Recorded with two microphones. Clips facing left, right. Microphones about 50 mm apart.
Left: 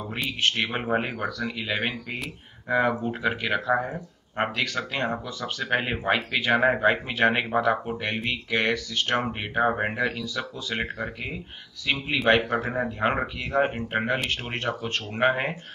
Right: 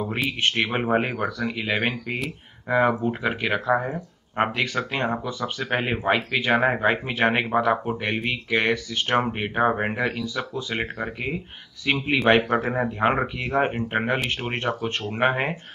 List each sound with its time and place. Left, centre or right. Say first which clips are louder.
0.7 s speech: right 4 dB; centre
2.1 s speech: right 4 dB; centre; by 12.9 s right
13.0 s speech: right 4 dB; centre